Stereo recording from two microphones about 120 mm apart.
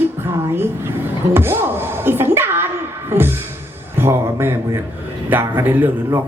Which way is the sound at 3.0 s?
20° right (ahead or behind).